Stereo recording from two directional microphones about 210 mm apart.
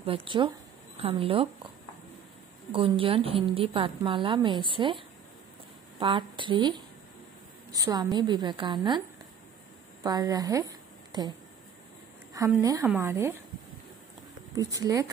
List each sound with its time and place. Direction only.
0.0 s a woman's voice: 25° right (ahead or behind)
2.7 s a woman's voice: 25° right (ahead or behind)
10.0 s a woman's voice: 20° right (ahead or behind)
11.1 s a sound: 20° right (ahead or behind)
12.4 s a woman's voice: 15° right (ahead or behind)
14.5 s a woman's voice: 15° right (ahead or behind)